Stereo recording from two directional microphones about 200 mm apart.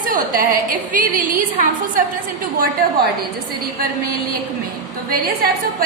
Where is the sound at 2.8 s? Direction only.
45° right (ahead or behind).